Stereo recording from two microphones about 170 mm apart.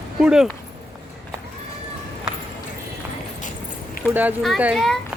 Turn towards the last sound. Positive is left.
turn(degrees=0)  # may be behind; listen again after turning